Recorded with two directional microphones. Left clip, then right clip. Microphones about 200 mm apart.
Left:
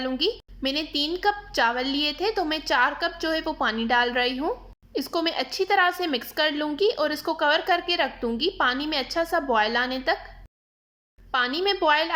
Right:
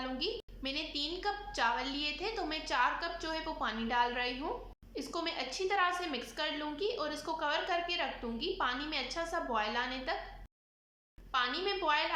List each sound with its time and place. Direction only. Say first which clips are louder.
0.0 s a woman's voice: left 11 dB; 40° left (ahead or behind)
11.3 s a woman's voice: left 10 dB; 40° left (ahead or behind)